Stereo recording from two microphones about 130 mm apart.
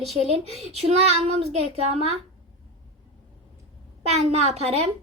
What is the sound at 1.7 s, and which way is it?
Child singing, 55° right (ahead or behind).